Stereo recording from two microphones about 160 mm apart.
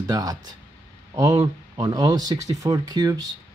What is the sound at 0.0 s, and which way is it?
Speech, 20° right (ahead or behind).